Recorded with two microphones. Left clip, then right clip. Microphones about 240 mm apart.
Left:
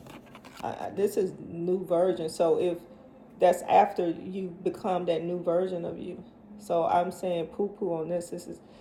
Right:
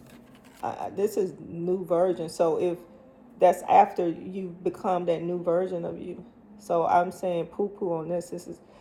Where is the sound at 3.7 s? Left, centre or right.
Right.